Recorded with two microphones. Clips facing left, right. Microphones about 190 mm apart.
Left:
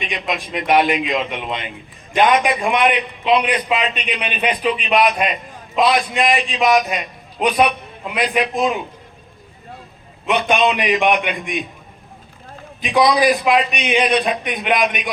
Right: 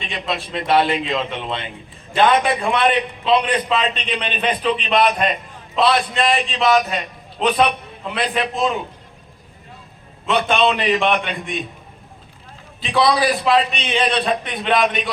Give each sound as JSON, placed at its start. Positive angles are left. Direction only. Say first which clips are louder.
{"t": 0.0, "sound": "a man's voice", "louder": "left 1 dB", "side_deg": 15}
{"t": 10.2, "sound": "a man's voice", "louder": "left 1 dB", "side_deg": 15}
{"t": 12.8, "sound": "a man's voice", "louder": "left 2 dB", "side_deg": 15}